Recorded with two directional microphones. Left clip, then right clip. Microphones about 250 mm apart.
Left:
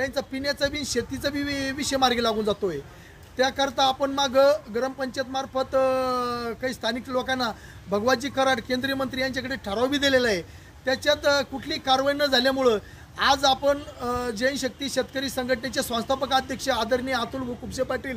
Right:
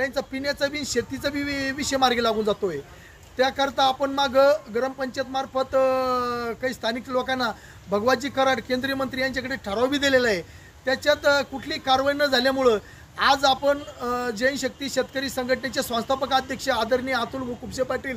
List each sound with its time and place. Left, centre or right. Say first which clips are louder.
0.0 s a man's voice: right 1 dB; centre